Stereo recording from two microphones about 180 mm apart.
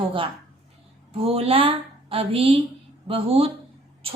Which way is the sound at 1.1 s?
30° right (ahead or behind).